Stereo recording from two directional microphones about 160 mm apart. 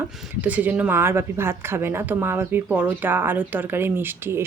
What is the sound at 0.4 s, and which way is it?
A woman's voice, 10° right (ahead or behind).